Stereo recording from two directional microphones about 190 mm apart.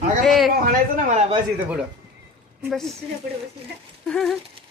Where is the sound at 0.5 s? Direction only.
50° right (ahead or behind).